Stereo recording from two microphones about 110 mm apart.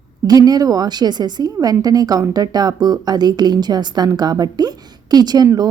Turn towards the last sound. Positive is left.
turn(degrees=-35)  # may be behind; listen again after turning